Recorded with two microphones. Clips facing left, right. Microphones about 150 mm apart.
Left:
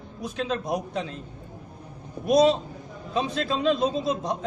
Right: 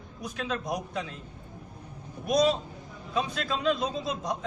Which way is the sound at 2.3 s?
25° left (ahead or behind).